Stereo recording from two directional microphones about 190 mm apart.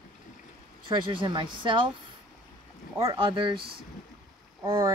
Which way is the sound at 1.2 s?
25° right (ahead or behind).